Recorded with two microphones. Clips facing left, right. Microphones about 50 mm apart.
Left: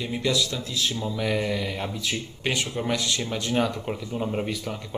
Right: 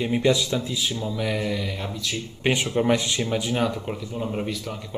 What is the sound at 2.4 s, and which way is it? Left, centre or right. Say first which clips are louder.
Speech: right 6 dB; right.